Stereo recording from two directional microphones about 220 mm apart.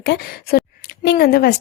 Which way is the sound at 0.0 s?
50° left (ahead or behind).